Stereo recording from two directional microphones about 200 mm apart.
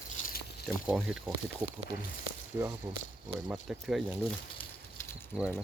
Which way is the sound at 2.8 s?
10° right (ahead or behind).